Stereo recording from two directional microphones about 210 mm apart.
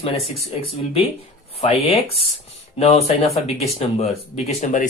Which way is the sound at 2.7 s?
30° left (ahead or behind).